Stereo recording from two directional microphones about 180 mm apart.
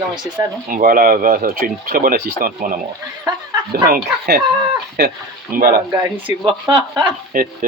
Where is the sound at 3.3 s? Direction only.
20° right (ahead or behind).